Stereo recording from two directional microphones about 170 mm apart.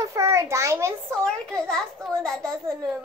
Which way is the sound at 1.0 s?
5° left (ahead or behind).